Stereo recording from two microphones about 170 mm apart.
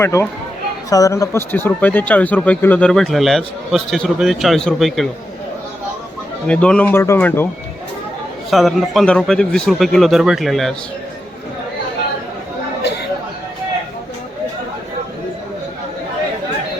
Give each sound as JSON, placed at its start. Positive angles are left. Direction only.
{"t": 0.0, "sound": "speech", "side_deg": 15}
{"t": 6.5, "sound": "speech", "side_deg": 5}
{"t": 8.4, "sound": "a man's voice", "side_deg": 0}